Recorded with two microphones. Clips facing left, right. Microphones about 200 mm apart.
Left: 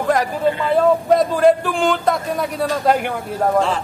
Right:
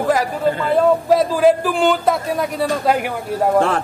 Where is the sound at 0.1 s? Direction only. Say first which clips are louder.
Left 1 dB; centre (ahead or behind).